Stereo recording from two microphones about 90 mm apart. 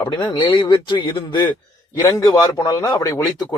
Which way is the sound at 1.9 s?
35° left (ahead or behind).